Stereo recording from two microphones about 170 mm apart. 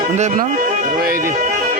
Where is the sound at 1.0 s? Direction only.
60° right (ahead or behind).